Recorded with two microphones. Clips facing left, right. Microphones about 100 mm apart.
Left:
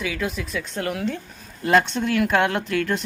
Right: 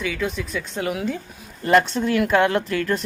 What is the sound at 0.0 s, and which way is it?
Speech, 5° left (ahead or behind).